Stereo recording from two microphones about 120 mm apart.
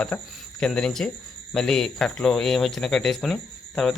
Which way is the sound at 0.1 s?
15° left (ahead or behind).